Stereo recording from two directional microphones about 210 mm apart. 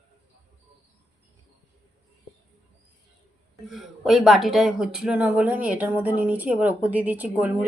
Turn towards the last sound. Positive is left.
turn(degrees=-10)  # may be behind; listen again after turning